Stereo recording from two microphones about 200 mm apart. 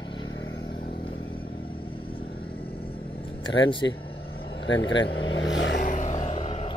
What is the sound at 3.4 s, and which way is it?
Speech, 25° left (ahead or behind).